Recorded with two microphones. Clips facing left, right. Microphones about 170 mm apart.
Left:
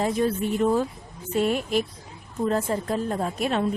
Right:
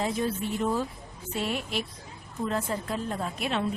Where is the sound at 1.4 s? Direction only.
45° left (ahead or behind).